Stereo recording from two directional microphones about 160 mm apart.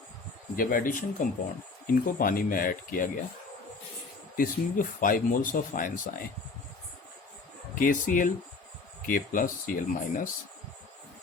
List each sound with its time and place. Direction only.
0.5 s speech: 60° left (ahead or behind)
4.4 s speech: 60° left (ahead or behind)
7.8 s speech: 55° left (ahead or behind)